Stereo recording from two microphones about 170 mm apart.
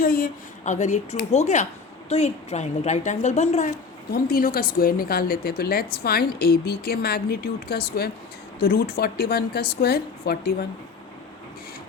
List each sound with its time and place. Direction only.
0.0 s a woman's voice: 55° left (ahead or behind)
4.1 s a woman's voice: 60° left (ahead or behind)